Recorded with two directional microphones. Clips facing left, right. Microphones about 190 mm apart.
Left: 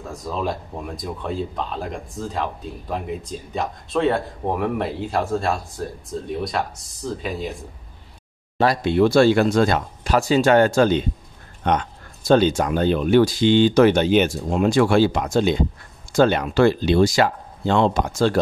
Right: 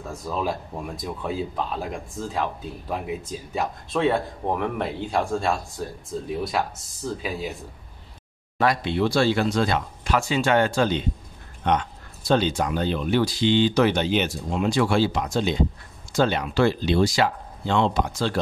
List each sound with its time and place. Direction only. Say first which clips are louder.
0.1 s speech: left 1 dB; centre (ahead or behind)
8.8 s speech: left 11 dB; 50° left (ahead or behind)